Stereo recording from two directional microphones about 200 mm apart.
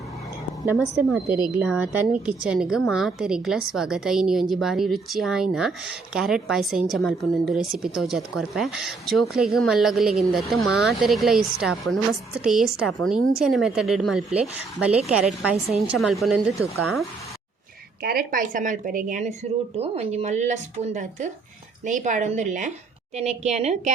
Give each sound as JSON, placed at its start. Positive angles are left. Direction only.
{"t": 0.6, "sound": "a woman's voice", "side_deg": -15}
{"t": 18.0, "sound": "a woman's voice", "side_deg": -45}